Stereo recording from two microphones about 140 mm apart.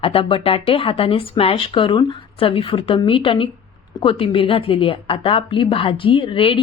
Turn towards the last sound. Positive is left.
turn(degrees=40)  # may be behind; listen again after turning